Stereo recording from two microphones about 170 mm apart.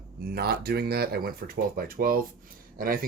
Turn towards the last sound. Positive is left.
turn(degrees=-55)  # may be behind; listen again after turning